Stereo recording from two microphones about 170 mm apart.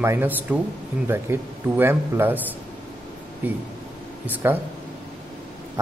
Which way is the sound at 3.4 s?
10° right (ahead or behind).